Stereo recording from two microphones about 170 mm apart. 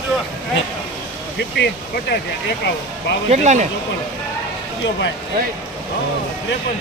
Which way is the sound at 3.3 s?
45° right (ahead or behind).